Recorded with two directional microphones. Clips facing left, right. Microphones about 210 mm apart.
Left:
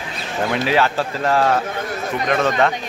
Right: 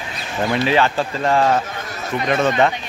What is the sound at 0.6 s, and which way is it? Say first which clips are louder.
Speech: right 1 dB; 5° left (ahead or behind).